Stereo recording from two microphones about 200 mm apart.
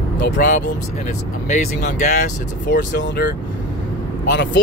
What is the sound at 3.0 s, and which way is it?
Speech, 60° left (ahead or behind).